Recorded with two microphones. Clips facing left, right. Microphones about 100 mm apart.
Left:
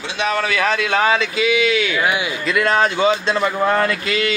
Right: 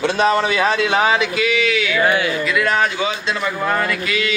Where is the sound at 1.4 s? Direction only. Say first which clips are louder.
Left 1 dB; 20° left (ahead or behind).